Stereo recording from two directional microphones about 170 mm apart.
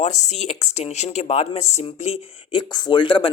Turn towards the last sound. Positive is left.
turn(degrees=30)  # may be behind; listen again after turning